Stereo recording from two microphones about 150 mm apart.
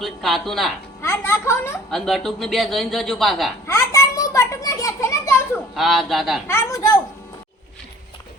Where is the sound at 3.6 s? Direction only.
20° left (ahead or behind).